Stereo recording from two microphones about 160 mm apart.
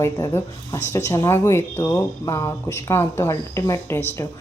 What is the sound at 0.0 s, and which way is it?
A woman's voice, 20° left (ahead or behind).